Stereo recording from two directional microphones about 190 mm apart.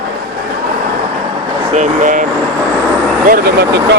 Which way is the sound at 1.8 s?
45° right (ahead or behind).